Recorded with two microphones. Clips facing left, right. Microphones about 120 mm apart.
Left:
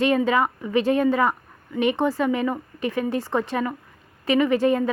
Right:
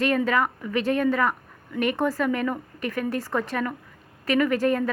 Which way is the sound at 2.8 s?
25° left (ahead or behind).